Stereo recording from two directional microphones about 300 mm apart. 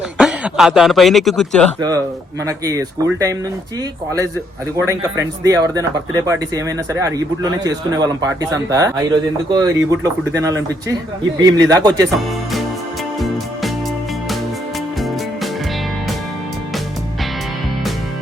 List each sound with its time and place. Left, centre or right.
0.2 s speech: centre
2.4 s speech: centre
4.9 s speech: centre
13.1 s music: centre